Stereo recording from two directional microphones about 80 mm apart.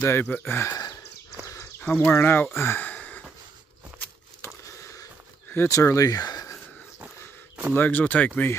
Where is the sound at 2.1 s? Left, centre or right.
Left.